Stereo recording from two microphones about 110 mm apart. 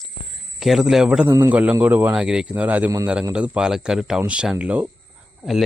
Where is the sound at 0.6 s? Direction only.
Centre (ahead or behind).